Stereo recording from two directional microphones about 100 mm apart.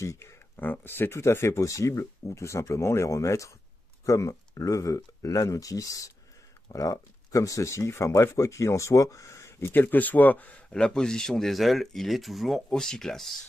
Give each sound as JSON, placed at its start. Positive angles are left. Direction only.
{"t": 0.0, "sound": "speech", "side_deg": 30}